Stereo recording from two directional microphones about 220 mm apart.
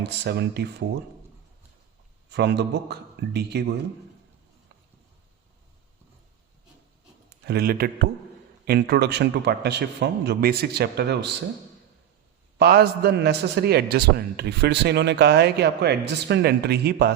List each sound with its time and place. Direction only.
0.0 s a man's voice: 50° right (ahead or behind)
2.3 s a man's voice: 50° right (ahead or behind)
7.4 s a man's voice: 45° right (ahead or behind)
12.5 s a man's voice: 45° right (ahead or behind)